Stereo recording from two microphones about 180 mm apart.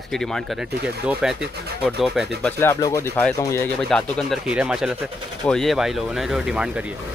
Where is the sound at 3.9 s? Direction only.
Centre (ahead or behind).